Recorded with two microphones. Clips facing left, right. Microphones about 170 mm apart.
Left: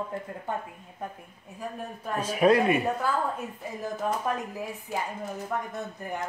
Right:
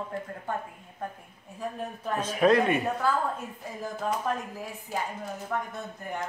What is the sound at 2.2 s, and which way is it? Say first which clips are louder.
Speech: left 1 dB; 10° left (ahead or behind).